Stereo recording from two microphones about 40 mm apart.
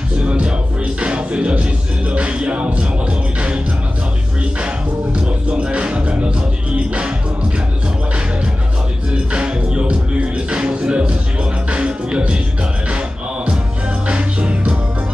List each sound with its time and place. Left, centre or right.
0.2 s music: right
5.1 s speech: right
9.1 s music: right
14.0 s music: right